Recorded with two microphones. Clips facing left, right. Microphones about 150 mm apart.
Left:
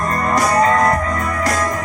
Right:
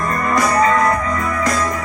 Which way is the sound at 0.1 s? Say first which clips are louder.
Left 1 dB; 35° left (ahead or behind).